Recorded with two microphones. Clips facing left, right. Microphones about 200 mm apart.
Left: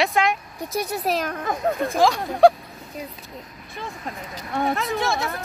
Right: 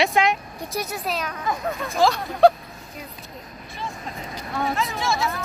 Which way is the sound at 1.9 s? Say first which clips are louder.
Even; 15° left (ahead or behind).